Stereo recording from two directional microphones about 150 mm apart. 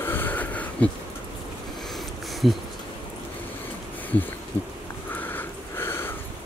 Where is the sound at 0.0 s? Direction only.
15° left (ahead or behind).